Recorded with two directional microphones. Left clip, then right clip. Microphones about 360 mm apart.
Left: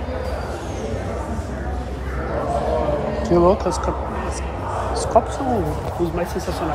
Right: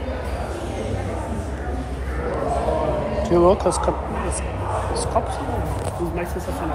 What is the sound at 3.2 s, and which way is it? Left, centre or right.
Speech, centre.